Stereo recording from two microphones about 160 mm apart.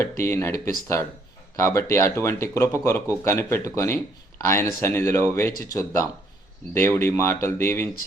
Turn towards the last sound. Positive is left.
turn(degrees=15)  # may be behind; listen again after turning